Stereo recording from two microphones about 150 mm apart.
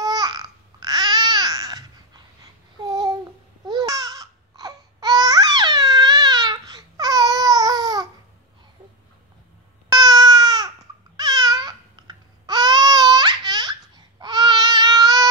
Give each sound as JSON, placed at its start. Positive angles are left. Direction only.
{"t": 0.0, "sound": "babbling", "side_deg": -25}
{"t": 9.8, "sound": "baby cry", "side_deg": -25}
{"t": 11.1, "sound": "babbling", "side_deg": -25}